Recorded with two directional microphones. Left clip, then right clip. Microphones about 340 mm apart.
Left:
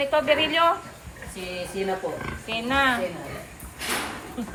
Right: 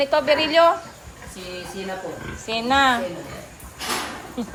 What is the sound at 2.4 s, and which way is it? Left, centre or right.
Speech, centre.